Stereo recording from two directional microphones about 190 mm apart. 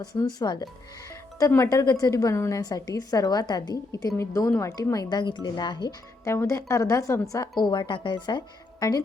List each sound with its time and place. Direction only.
0.0 s speech: 20° left (ahead or behind)